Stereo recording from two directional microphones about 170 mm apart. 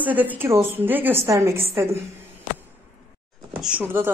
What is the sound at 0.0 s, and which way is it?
A woman's voice, 10° right (ahead or behind).